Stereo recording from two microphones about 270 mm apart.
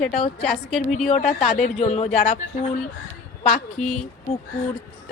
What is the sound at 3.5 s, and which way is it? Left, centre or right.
Speech, centre.